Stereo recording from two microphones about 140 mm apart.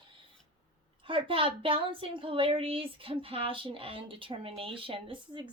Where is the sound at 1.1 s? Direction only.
40° right (ahead or behind).